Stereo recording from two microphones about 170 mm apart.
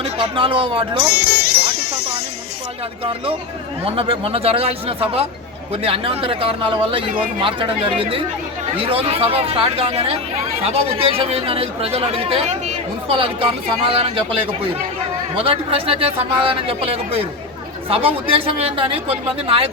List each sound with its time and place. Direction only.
0.0 s speech: 30° right (ahead or behind)
1.1 s music: 65° left (ahead or behind)
3.0 s speech: 30° right (ahead or behind)
15.4 s speech: 35° right (ahead or behind)